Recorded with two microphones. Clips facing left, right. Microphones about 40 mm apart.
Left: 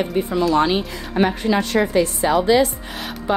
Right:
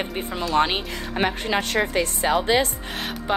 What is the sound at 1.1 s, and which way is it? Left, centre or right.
A woman's voice, right.